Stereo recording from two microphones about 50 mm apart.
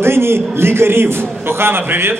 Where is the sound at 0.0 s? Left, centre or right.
Right.